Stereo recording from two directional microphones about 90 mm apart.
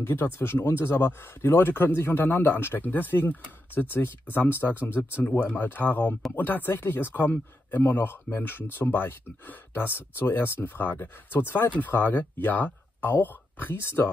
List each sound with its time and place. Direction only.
0.0 s speech: 25° left (ahead or behind)